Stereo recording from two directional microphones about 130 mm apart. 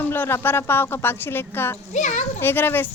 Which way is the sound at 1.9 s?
70° left (ahead or behind).